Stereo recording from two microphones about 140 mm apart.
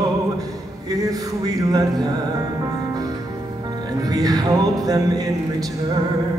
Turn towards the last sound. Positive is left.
turn(degrees=-25)  # may be behind; listen again after turning